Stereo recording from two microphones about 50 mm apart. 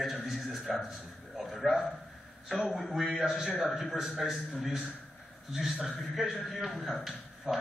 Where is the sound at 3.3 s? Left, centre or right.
Centre.